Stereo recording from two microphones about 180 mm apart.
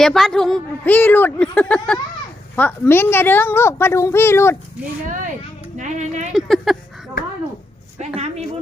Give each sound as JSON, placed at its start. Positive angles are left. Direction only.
{"t": 0.0, "sound": "a woman's voice", "side_deg": 0}
{"t": 5.7, "sound": "speech", "side_deg": -40}
{"t": 6.3, "sound": "speech", "side_deg": 0}
{"t": 7.9, "sound": "a man's voice", "side_deg": -40}